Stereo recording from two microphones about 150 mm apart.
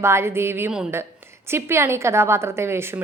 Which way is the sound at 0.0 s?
15° right (ahead or behind).